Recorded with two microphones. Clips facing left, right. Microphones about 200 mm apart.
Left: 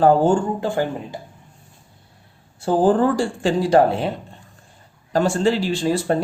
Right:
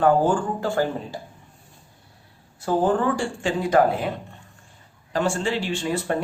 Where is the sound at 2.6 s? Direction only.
30° left (ahead or behind).